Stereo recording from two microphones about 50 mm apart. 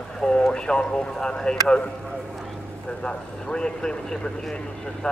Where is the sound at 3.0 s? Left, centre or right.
Centre.